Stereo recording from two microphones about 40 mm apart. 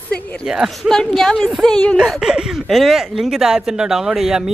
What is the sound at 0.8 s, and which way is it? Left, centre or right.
Speech, centre.